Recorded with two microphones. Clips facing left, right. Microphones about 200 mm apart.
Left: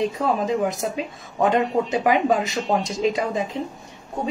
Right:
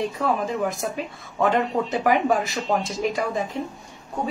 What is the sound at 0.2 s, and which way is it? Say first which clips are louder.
Speech: right 1 dB; 20° left (ahead or behind).